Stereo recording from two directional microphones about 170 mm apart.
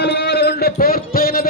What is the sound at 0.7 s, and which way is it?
Music, 60° left (ahead or behind).